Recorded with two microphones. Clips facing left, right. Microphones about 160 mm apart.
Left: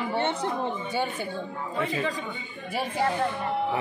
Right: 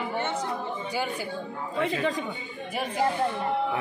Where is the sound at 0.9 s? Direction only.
25° left (ahead or behind).